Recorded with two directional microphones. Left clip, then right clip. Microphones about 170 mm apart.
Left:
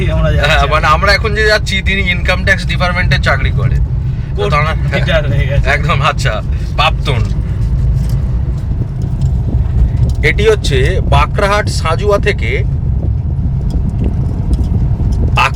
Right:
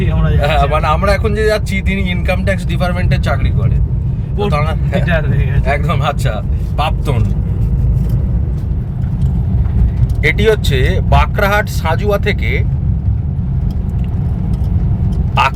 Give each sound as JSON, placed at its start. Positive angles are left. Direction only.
{"t": 0.3, "sound": "speech", "side_deg": -15}
{"t": 10.2, "sound": "speech", "side_deg": -5}
{"t": 15.4, "sound": "a sound", "side_deg": 0}